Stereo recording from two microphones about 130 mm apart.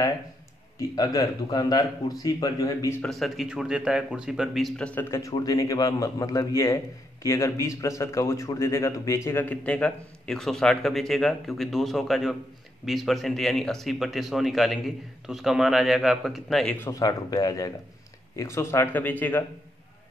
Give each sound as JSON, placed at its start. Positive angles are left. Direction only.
{"t": 0.7, "sound": "a man's voice", "side_deg": 30}
{"t": 3.0, "sound": "speech", "side_deg": 0}
{"t": 16.8, "sound": "a man's voice", "side_deg": 30}